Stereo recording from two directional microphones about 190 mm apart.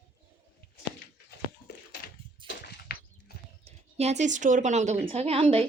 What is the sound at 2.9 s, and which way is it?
Horse, 55° left (ahead or behind).